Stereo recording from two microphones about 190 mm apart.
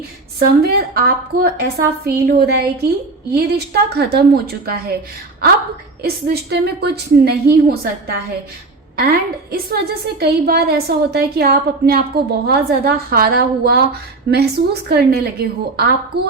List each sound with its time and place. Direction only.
0.3 s a woman's voice: 55° right (ahead or behind)
6.0 s a woman's voice: 60° right (ahead or behind)